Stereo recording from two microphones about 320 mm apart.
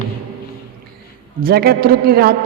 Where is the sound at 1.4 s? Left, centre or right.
Right.